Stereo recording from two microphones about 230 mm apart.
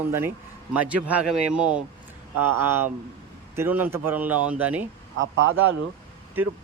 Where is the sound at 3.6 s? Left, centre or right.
Centre.